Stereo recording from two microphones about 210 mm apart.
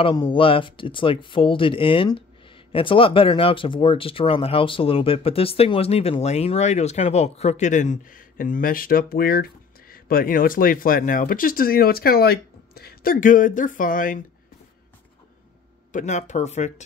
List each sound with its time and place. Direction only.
0.0 s speech: 20° left (ahead or behind); by 14.2 s 40° left (ahead or behind)
15.9 s speech: 35° left (ahead or behind)